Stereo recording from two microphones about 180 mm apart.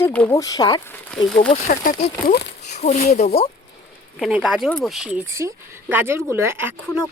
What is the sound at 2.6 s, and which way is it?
Speech, 40° left (ahead or behind).